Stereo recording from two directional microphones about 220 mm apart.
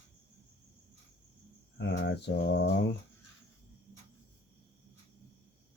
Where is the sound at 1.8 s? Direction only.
50° left (ahead or behind).